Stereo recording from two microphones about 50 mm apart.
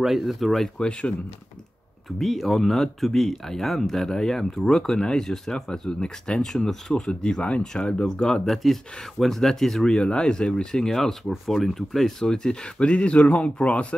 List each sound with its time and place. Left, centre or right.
0.0 s speech: centre
0.7 s speech: centre
2.1 s speech: centre; by 13.9 s left